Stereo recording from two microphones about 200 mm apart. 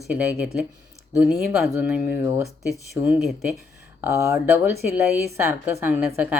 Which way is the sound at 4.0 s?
15° right (ahead or behind).